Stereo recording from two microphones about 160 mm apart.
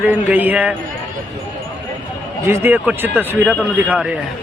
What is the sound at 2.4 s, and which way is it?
Speech, 15° right (ahead or behind).